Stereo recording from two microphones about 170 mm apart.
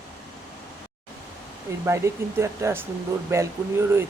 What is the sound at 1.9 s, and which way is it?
Speech, 15° right (ahead or behind).